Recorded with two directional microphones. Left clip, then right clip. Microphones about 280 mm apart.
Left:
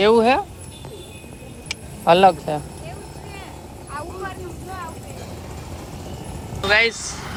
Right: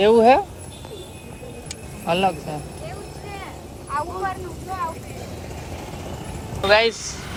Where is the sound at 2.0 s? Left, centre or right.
Left.